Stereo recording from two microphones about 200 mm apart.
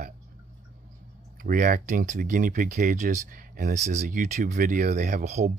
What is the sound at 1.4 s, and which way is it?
Speech, 45° right (ahead or behind).